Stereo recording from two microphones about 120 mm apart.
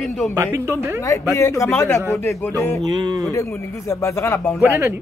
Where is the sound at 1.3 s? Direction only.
25° left (ahead or behind).